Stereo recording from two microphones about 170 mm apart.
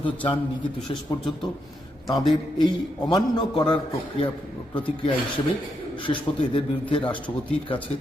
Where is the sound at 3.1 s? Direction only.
25° left (ahead or behind).